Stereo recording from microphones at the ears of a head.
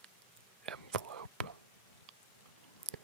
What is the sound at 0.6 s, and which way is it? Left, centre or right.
Whispering, right.